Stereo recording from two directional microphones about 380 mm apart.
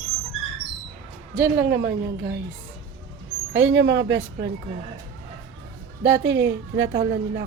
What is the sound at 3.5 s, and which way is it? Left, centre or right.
A woman's voice, right.